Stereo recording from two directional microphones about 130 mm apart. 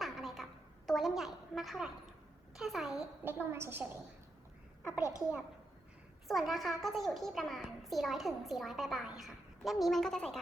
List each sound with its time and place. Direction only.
0.0 s a sound: centre (ahead or behind)
0.9 s a woman's voice: centre (ahead or behind)
3.2 s a woman's voice: 15° right (ahead or behind)
4.9 s a woman's voice: 25° left (ahead or behind)
6.2 s a child's voice: centre (ahead or behind)